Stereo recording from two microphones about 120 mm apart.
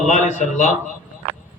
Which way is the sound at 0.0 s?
85° left.